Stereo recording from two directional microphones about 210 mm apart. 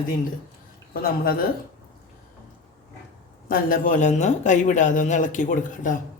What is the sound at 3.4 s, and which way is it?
A man's voice, 40° left (ahead or behind).